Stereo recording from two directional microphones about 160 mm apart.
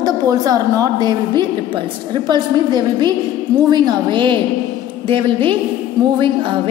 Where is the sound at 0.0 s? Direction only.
25° right (ahead or behind).